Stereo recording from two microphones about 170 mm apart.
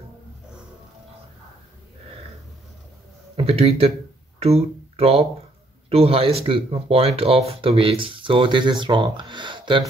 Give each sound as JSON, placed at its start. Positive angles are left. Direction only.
{"t": 3.3, "sound": "speech", "side_deg": -35}